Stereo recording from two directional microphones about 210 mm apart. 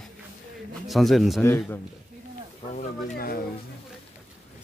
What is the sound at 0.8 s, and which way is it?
Speech, centre (ahead or behind).